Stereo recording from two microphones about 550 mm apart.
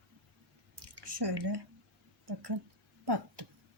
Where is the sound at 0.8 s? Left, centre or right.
Right.